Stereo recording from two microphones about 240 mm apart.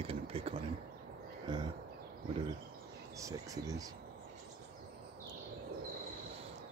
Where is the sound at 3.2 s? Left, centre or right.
Centre.